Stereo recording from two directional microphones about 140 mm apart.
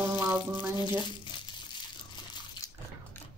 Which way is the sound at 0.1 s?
15° right (ahead or behind).